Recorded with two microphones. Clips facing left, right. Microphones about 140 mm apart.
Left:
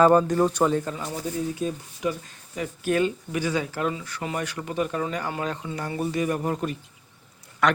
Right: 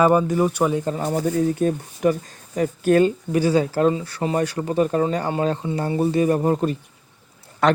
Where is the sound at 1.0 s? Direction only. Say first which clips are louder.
Right 9 dB; 50° right (ahead or behind).